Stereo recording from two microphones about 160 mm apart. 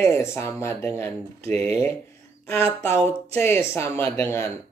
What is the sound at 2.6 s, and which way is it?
Speech, 40° right (ahead or behind).